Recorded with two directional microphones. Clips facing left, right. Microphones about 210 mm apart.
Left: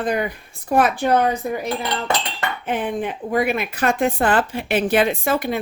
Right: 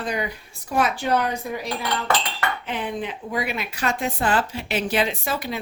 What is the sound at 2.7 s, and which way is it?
Speech, 50° left (ahead or behind).